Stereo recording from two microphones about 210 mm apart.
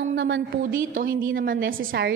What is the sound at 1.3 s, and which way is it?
Speech, 40° right (ahead or behind).